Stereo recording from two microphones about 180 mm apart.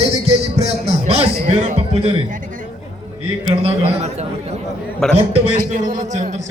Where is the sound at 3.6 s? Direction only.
35° right (ahead or behind).